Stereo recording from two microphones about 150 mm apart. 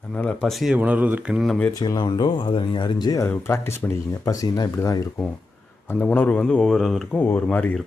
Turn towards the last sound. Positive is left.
turn(degrees=10)  # may be behind; listen again after turning